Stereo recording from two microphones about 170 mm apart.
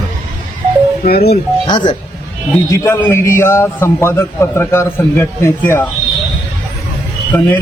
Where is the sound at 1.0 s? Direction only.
65° left (ahead or behind).